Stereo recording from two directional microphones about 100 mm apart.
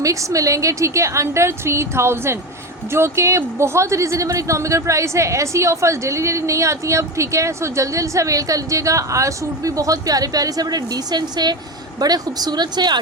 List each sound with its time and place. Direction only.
0.0 s a woman's voice: 30° right (ahead or behind)